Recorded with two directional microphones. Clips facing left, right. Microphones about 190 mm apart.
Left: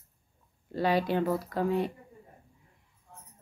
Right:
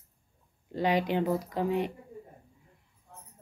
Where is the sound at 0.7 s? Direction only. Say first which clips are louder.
Even; 15° right (ahead or behind).